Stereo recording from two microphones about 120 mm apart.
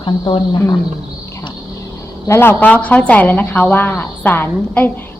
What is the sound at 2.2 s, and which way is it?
A woman's voice, 20° left (ahead or behind).